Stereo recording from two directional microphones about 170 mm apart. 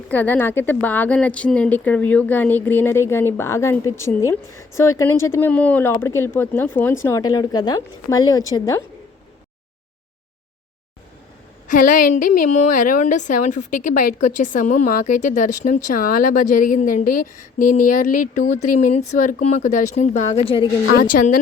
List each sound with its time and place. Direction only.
0.1 s speech: 10° left (ahead or behind)
11.7 s a woman's voice: 50° left (ahead or behind); by 20.7 s 35° left (ahead or behind)
20.9 s a woman's voice: 55° left (ahead or behind)